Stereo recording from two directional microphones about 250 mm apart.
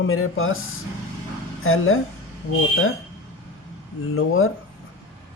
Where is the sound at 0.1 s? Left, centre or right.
Left.